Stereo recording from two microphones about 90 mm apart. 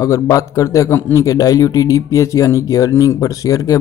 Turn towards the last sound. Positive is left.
turn(degrees=40)  # may be behind; listen again after turning